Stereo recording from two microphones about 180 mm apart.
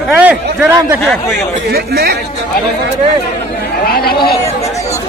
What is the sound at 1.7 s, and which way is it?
Speech, 60° right (ahead or behind).